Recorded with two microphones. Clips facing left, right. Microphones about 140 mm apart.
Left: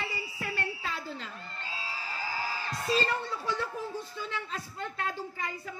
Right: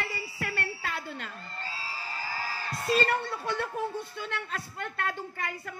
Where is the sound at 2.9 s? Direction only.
60° right (ahead or behind).